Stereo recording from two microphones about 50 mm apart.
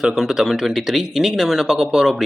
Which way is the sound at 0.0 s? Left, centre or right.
Centre.